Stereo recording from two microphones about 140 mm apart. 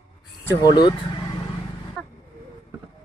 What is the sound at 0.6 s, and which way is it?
Speech, 30° left (ahead or behind).